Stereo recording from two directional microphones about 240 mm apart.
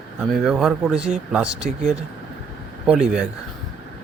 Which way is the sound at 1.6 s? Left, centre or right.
Right.